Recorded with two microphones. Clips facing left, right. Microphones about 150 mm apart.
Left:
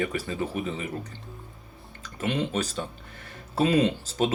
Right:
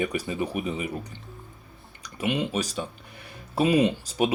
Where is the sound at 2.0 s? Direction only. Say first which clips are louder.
Right 1 dB; 10° right (ahead or behind).